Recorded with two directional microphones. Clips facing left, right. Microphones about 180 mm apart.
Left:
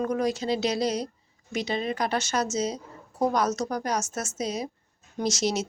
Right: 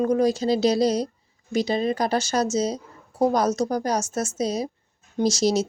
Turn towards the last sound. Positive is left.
turn(degrees=-35)  # may be behind; listen again after turning